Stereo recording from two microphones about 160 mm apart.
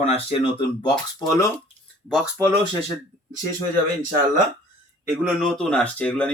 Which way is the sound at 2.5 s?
30° right (ahead or behind).